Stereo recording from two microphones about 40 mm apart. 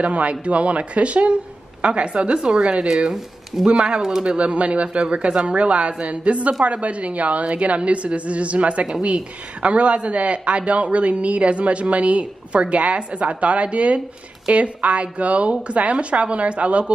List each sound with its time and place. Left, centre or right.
0.0 s speech: right; by 4.2 s centre
4.2 s speech: right